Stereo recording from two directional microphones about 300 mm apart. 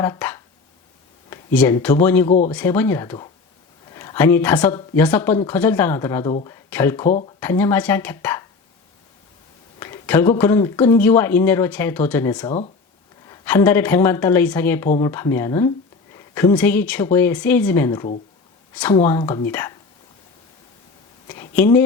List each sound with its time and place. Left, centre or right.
0.0 s a sound: centre
1.5 s speech: centre
2.2 s speech: left
2.5 s speech: centre
7.1 s speech: left
7.3 s speech: centre
9.8 s speech: centre
12.5 s speech: left
13.2 s a woman's voice: centre
21.2 s a sound: centre